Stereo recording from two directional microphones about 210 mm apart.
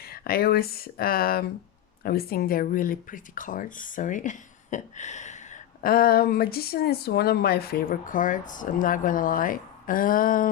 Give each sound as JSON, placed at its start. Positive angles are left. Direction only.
{"t": 0.0, "sound": "speech", "side_deg": 45}